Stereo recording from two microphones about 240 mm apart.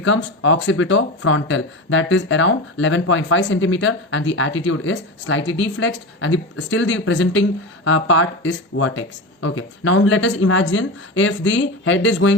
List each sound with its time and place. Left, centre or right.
0.0 s speech: left